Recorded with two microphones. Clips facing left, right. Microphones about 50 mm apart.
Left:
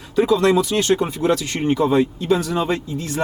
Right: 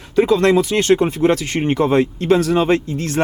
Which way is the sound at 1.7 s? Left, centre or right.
Right.